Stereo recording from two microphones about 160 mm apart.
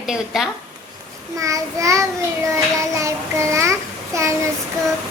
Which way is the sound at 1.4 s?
20° right (ahead or behind).